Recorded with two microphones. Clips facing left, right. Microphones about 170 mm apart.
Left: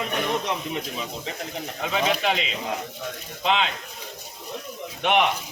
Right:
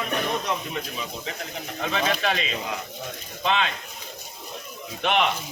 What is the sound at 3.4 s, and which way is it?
Speech, 15° left (ahead or behind).